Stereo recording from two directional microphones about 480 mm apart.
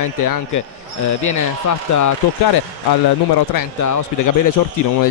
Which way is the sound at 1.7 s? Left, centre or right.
Left.